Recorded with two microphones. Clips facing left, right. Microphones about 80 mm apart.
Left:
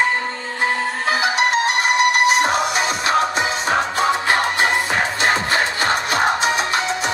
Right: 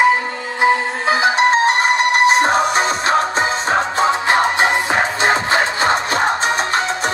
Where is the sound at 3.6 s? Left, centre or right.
Right.